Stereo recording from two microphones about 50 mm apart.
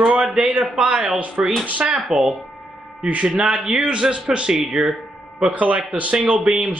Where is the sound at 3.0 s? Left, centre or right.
Right.